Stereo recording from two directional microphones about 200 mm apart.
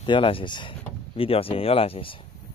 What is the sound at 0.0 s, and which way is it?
Speech, 25° left (ahead or behind).